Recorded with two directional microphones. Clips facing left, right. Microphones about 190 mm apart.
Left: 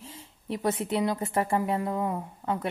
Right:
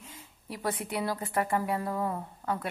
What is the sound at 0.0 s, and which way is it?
A woman's voice, 30° left (ahead or behind).